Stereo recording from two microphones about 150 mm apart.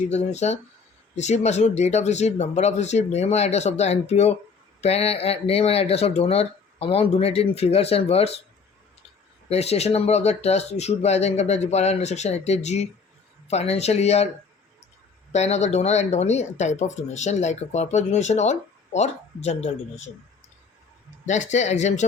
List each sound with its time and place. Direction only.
0.0 s speech: 50° left (ahead or behind)
9.5 s speech: 45° left (ahead or behind)
15.3 s speech: 45° left (ahead or behind)
21.2 s speech: 55° left (ahead or behind)